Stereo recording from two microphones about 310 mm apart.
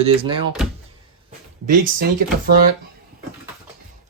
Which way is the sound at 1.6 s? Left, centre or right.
Right.